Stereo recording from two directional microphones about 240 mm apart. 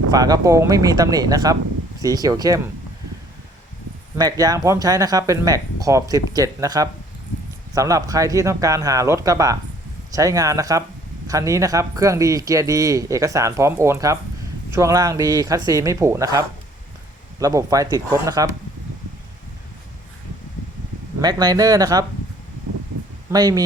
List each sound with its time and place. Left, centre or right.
0.1 s speech: centre
4.2 s speech: centre
17.4 s speech: centre
21.2 s speech: centre
23.3 s speech: centre